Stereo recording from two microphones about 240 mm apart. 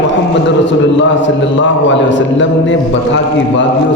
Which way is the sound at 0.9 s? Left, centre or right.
Left.